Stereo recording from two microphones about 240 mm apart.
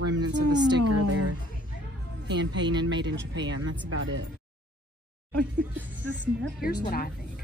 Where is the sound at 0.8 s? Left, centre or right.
Right.